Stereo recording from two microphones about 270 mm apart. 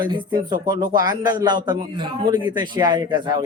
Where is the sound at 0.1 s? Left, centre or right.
Centre.